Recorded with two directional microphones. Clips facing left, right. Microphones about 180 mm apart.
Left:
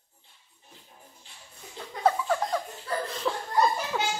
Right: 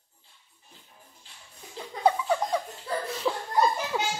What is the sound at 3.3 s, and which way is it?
Laughter, 10° right (ahead or behind).